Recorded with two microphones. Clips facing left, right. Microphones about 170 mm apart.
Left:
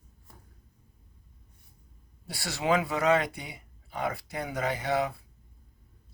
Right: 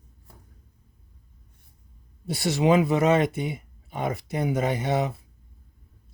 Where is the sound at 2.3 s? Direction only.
20° right (ahead or behind).